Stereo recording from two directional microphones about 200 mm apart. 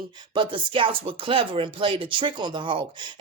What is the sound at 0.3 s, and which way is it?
Speech, 25° right (ahead or behind).